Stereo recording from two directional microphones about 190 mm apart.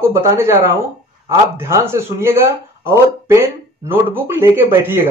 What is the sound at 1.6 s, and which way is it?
A man's voice, 15° right (ahead or behind).